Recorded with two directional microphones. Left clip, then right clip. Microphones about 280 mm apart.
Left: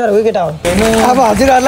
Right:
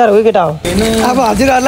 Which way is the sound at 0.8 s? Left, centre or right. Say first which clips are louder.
Left 2 dB; centre.